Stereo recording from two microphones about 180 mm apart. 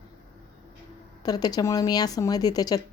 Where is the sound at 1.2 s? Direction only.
20° left (ahead or behind).